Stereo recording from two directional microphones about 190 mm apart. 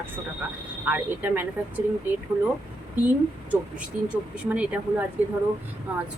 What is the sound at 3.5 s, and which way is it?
Speech, 5° right (ahead or behind).